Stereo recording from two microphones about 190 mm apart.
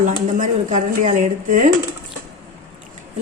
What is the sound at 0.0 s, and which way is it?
Speech, 45° right (ahead or behind).